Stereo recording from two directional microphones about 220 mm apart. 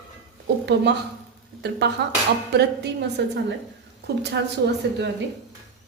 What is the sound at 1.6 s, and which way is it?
A woman's voice, 50° right (ahead or behind).